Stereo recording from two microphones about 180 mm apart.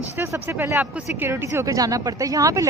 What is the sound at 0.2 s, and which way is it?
A woman's voice, 10° right (ahead or behind).